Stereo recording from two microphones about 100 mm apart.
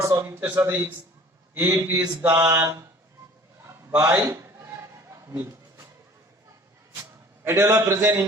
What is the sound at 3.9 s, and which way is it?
Speech, 10° right (ahead or behind).